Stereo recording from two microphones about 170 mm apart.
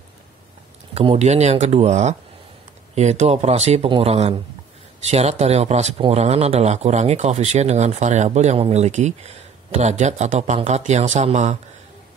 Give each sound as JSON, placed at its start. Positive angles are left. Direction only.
{"t": 0.9, "sound": "speech", "side_deg": -40}